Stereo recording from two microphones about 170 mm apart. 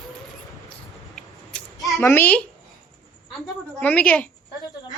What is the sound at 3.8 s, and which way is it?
Speech, 10° left (ahead or behind).